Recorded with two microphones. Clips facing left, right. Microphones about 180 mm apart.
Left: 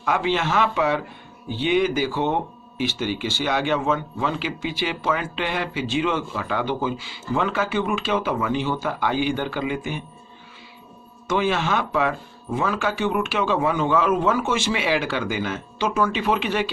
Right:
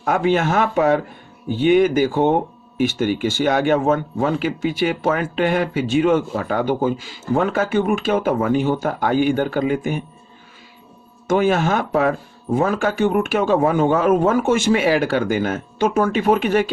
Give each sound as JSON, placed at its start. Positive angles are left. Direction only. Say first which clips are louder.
{"t": 0.0, "sound": "speech", "louder": "right 5 dB", "side_deg": -45}
{"t": 11.3, "sound": "speech", "louder": "right 5 dB", "side_deg": -45}